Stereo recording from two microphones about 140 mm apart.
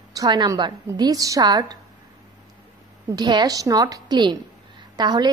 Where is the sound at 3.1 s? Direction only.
30° right (ahead or behind).